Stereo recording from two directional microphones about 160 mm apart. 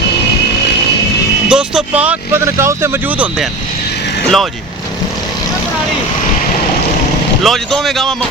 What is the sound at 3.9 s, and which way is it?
Vehicle, 90° left.